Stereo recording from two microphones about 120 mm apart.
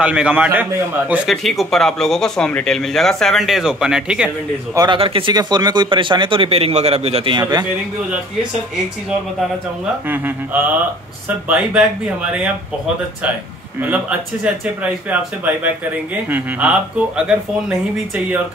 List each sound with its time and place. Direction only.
0.0 s speech: 10° right (ahead or behind)
1.3 s speech: centre (ahead or behind)
4.9 s speech: 50° right (ahead or behind)
5.3 s speech: 35° right (ahead or behind); by 7.3 s 55° right (ahead or behind)
7.3 s a man's voice: 35° right (ahead or behind)
10.0 s speech: 15° right (ahead or behind)
13.7 s speech: 15° right (ahead or behind)